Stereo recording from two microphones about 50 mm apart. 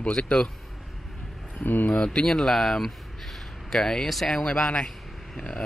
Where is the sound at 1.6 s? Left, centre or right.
Left.